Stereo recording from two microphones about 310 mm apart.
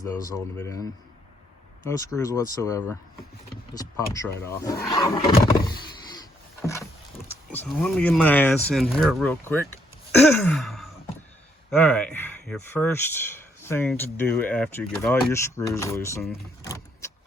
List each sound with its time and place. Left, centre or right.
0.0 s speech: centre
6.6 s rowboat: centre
7.3 s speech: centre
16.6 s vehicle: centre